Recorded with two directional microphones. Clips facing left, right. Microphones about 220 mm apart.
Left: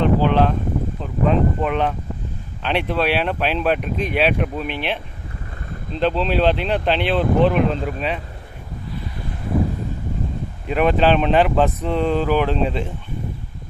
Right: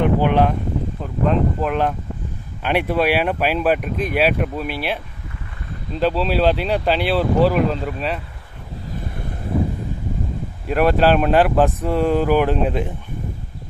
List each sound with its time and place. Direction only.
0.0 s vehicle: 15° right (ahead or behind)
1.2 s speech: centre (ahead or behind)
6.0 s speech: 5° right (ahead or behind)
8.9 s wind: 50° right (ahead or behind)
10.7 s speech: 5° right (ahead or behind)